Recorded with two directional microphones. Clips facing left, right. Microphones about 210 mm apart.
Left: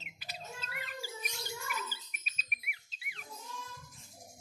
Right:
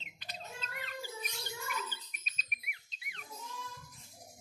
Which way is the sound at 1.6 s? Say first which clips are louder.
Right 2 dB; 5° left (ahead or behind).